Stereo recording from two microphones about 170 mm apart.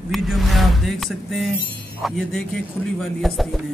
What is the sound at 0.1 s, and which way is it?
Speech, centre (ahead or behind).